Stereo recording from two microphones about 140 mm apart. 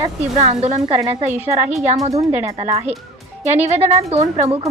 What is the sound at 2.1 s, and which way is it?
A woman's voice, 50° right (ahead or behind).